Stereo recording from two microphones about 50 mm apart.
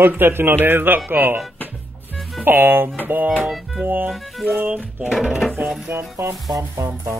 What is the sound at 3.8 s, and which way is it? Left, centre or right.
A man's voice, right.